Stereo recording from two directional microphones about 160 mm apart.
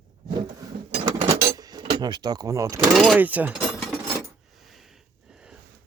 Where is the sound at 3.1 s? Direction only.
10° right (ahead or behind).